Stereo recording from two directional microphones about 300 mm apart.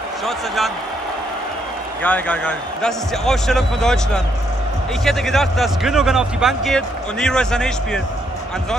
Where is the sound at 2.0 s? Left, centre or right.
Centre.